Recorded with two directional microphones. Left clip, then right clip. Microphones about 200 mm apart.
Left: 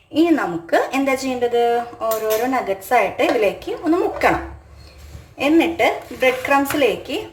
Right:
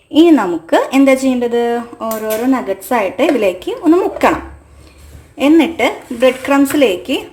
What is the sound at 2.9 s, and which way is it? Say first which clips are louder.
Speech: right 3 dB; 40° right (ahead or behind).